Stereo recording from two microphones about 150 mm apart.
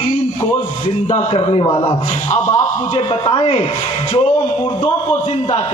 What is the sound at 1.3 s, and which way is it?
Speech, 35° left (ahead or behind).